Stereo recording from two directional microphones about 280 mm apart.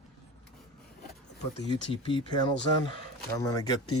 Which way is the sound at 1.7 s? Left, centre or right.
Centre.